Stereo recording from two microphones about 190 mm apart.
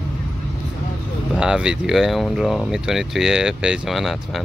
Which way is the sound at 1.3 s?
5° right (ahead or behind).